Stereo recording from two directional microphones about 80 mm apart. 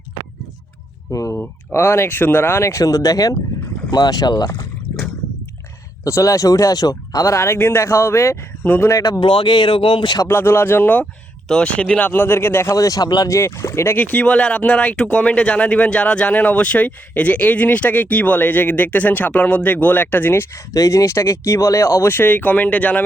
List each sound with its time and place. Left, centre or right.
1.1 s speech: left
2.0 s speech: left
3.9 s speech: left
6.1 s speech: left
9.2 s speech: left
10.2 s speech: left
11.0 s speech: centre; by 12.7 s left
12.7 s speech: left
13.3 s speech: left
13.9 s speech: centre
20.7 s speech: left; by 23.0 s centre